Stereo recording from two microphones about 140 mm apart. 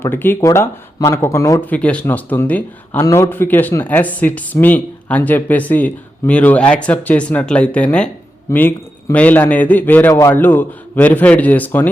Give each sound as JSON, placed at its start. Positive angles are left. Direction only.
{"t": 0.0, "sound": "speech", "side_deg": 15}
{"t": 1.7, "sound": "speech", "side_deg": 10}